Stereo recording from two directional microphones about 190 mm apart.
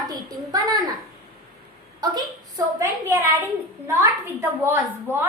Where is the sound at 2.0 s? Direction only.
20° right (ahead or behind).